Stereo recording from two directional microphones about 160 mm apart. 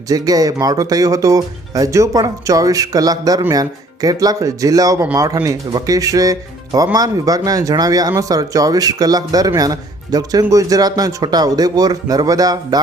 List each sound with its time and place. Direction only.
0.1 s speech: 20° right (ahead or behind)